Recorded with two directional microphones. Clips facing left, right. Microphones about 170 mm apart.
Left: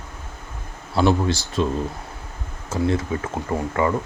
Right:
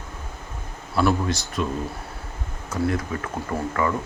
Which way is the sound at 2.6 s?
25° left (ahead or behind).